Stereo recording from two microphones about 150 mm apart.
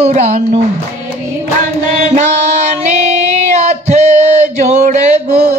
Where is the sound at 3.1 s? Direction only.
50° right (ahead or behind).